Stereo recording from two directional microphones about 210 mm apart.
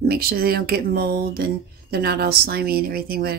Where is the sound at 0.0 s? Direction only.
45° right (ahead or behind).